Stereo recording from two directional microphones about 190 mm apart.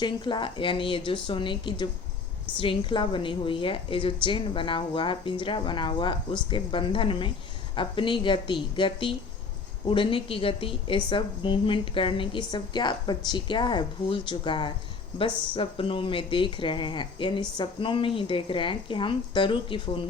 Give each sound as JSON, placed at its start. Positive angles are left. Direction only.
{"t": 0.0, "sound": "a woman's voice", "side_deg": 25}